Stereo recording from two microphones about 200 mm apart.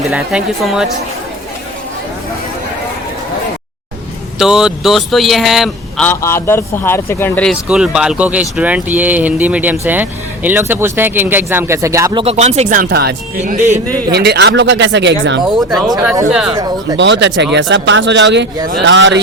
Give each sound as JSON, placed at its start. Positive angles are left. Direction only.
{"t": 0.1, "sound": "speech", "side_deg": 0}
{"t": 4.4, "sound": "speech", "side_deg": -5}
{"t": 12.2, "sound": "speech", "side_deg": -30}
{"t": 13.4, "sound": "speech", "side_deg": -35}
{"t": 14.1, "sound": "speech", "side_deg": -55}
{"t": 16.0, "sound": "speech", "side_deg": -5}
{"t": 17.0, "sound": "speech", "side_deg": -60}